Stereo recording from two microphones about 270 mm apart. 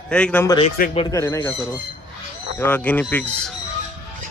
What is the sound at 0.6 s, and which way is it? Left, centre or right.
Speech, left.